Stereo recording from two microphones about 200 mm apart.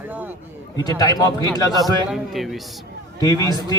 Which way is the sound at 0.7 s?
20° left (ahead or behind).